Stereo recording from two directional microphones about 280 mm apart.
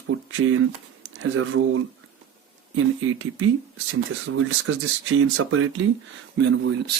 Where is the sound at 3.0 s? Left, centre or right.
Right.